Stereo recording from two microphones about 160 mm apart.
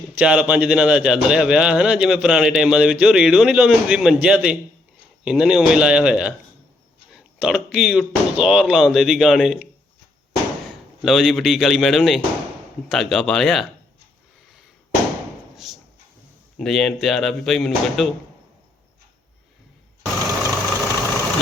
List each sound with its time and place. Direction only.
0.2 s a man's voice: 5° right (ahead or behind)
11.0 s a man's voice: centre (ahead or behind)
15.5 s a sound: centre (ahead or behind)
16.6 s a man's voice: 5° left (ahead or behind)
20.4 s vehicle: 20° right (ahead or behind)